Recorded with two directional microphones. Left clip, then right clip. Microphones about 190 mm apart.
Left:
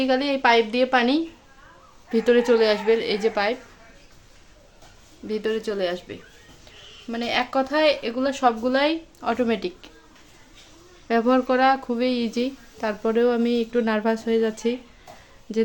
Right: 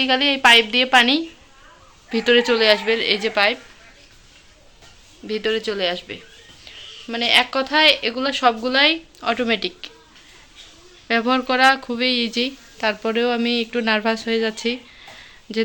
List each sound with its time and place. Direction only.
0.0 s a woman's voice: 5° left (ahead or behind)
5.3 s a woman's voice: 5° left (ahead or behind)
11.1 s a woman's voice: 10° left (ahead or behind)